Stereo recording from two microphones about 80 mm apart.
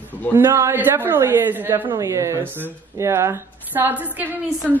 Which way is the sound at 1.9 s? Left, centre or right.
Right.